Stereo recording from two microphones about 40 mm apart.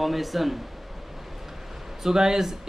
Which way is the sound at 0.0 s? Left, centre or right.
Centre.